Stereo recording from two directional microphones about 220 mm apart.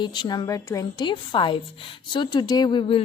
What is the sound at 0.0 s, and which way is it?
A woman's voice, 20° left (ahead or behind).